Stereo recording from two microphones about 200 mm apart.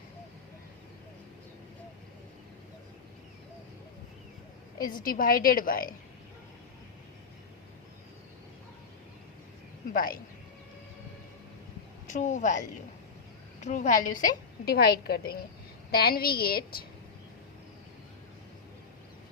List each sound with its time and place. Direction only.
4.8 s a woman's voice: 45° left (ahead or behind)
9.9 s a woman's voice: 45° left (ahead or behind)
12.0 s a woman's voice: 40° left (ahead or behind)